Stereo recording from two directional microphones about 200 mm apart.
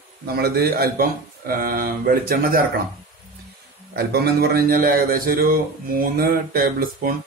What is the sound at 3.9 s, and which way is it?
A man's voice, 50° right (ahead or behind).